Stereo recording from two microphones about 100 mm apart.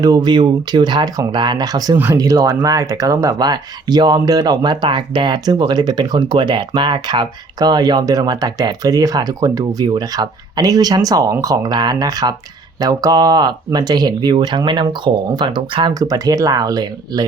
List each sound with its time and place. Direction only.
0.0 s speech: 45° right (ahead or behind)
16.0 s speech: 35° right (ahead or behind)